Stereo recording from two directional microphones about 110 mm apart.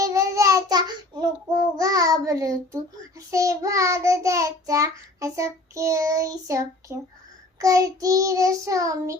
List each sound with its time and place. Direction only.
0.0 s child singing: 30° right (ahead or behind)